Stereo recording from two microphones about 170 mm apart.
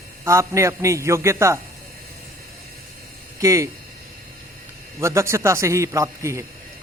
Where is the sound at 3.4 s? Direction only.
20° right (ahead or behind).